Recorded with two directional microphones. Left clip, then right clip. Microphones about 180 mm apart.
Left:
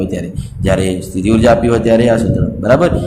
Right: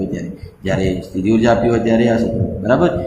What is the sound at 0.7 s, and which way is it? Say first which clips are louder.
Speech: left 4 dB; 50° left (ahead or behind).